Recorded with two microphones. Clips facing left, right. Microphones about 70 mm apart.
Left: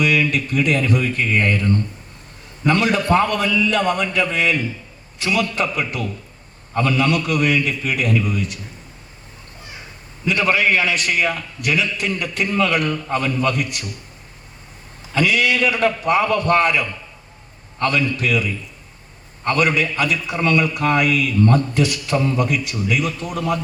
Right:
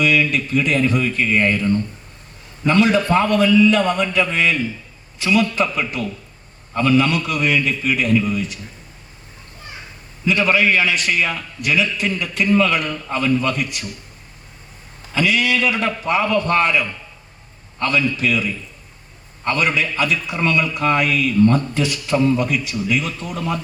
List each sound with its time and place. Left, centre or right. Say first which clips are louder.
0.3 s a man's voice: even; left
2.6 s a man's voice: right 2 dB; left
10.2 s a man's voice: right 1 dB; left
15.1 s a man's voice: even; left
19.5 s a man's voice: left 1 dB; left